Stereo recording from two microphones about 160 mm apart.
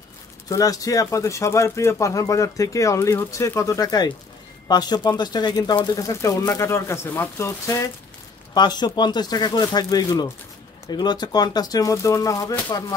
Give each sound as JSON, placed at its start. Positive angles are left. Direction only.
{"t": 0.5, "sound": "speech", "side_deg": 20}